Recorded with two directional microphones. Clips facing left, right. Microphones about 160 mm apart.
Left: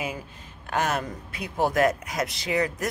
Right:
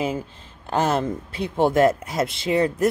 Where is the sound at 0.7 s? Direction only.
30° right (ahead or behind).